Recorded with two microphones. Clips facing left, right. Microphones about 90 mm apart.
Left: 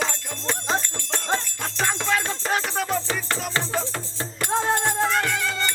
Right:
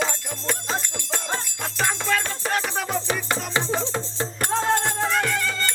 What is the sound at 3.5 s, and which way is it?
Music, 20° right (ahead or behind).